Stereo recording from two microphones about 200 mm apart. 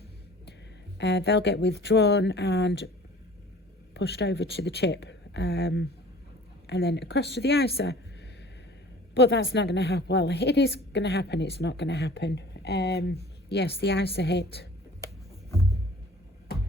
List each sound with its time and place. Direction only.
0.9 s a woman's voice: 60° left (ahead or behind)
3.9 s a woman's voice: 60° left (ahead or behind)